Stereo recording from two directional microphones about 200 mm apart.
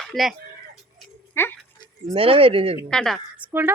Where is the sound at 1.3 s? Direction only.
10° left (ahead or behind).